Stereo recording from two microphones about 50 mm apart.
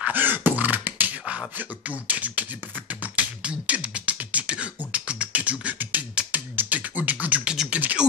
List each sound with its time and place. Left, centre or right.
0.0 s beatboxing: right